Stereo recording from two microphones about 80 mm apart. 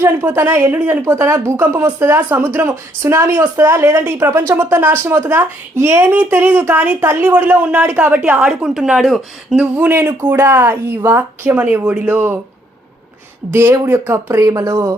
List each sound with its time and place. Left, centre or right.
0.2 s speech: right
1.1 s a woman's voice: right; by 9.6 s centre
9.7 s speech: right
13.5 s speech: right